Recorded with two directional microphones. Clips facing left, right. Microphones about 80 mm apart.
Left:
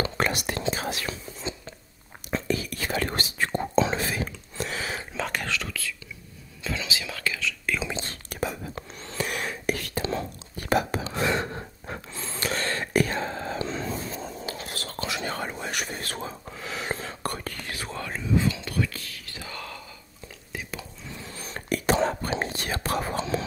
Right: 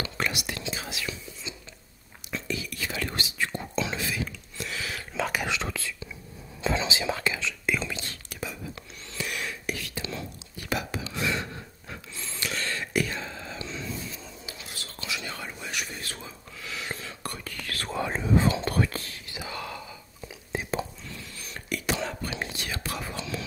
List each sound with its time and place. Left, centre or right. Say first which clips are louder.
0.0 s whispering: left 5 dB; left
5.1 s whispering: right 4 dB; centre
5.5 s whispering: even; right
7.9 s whispering: left 3 dB; left
8.3 s whispering: left 7 dB; left
18.1 s whispering: right 1 dB; right
19.3 s a sound: right 3 dB; centre
20.5 s whispering: right 4 dB; right
21.4 s whispering: left 5 dB; left